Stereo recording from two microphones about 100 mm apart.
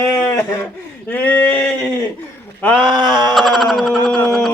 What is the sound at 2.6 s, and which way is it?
Sheep, 10° left (ahead or behind).